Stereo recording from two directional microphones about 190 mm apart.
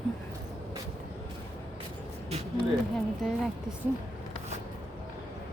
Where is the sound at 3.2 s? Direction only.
Centre (ahead or behind).